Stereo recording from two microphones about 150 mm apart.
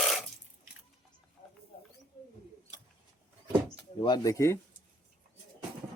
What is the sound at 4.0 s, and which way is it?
Speech, 25° left (ahead or behind).